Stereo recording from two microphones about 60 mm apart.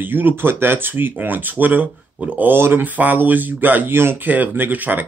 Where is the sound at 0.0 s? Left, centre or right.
Right.